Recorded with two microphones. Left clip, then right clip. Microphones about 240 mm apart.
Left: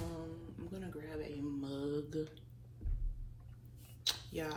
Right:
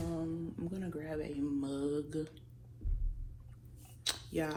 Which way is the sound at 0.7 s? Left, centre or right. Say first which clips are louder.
Right 2 dB; right.